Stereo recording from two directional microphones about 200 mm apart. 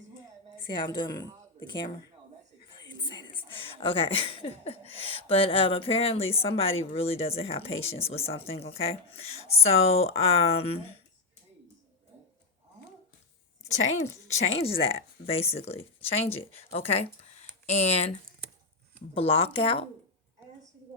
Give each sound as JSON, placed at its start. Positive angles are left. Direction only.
{"t": 0.7, "sound": "speech", "side_deg": 25}
{"t": 2.7, "sound": "speech", "side_deg": 20}
{"t": 14.3, "sound": "speech", "side_deg": 30}